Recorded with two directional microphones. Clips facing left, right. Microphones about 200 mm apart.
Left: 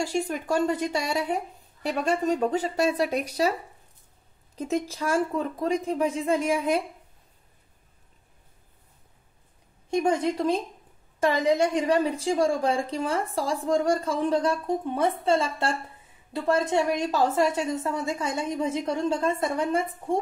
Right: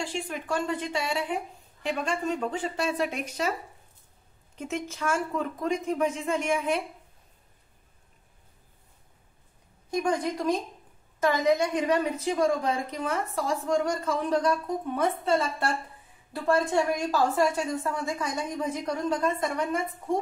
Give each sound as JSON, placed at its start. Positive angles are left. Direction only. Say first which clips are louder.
{"t": 0.0, "sound": "a woman's voice", "louder": "left 5 dB", "side_deg": 40}
{"t": 4.6, "sound": "a woman's voice", "louder": "left 5 dB", "side_deg": 35}
{"t": 9.8, "sound": "a woman's voice", "louder": "left 3 dB", "side_deg": 25}